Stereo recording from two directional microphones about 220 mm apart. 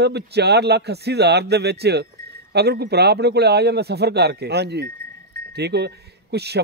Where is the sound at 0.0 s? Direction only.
50° right (ahead or behind).